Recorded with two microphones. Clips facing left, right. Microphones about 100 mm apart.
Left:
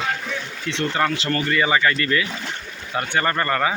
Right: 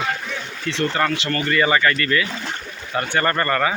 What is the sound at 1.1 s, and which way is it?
Speech, 35° left (ahead or behind).